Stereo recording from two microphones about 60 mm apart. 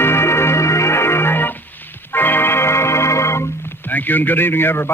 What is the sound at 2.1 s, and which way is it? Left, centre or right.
Organ, left.